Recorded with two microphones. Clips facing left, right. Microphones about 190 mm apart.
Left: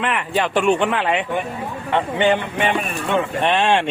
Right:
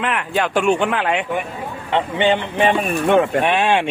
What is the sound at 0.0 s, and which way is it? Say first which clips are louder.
A man's voice: even; centre (ahead or behind).